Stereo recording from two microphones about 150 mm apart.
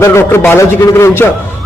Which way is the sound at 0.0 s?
20° left (ahead or behind).